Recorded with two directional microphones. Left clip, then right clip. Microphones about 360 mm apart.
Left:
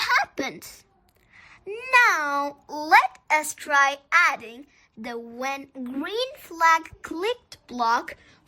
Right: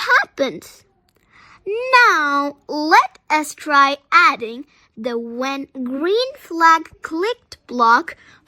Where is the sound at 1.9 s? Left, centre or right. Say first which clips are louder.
Right 6 dB; centre.